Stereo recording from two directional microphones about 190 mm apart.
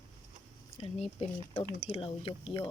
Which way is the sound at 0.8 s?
30° left (ahead or behind).